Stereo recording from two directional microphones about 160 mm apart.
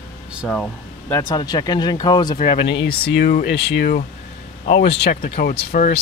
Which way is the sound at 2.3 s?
40° left (ahead or behind).